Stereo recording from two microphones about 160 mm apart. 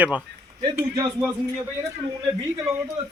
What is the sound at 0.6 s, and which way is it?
Speech, 30° right (ahead or behind).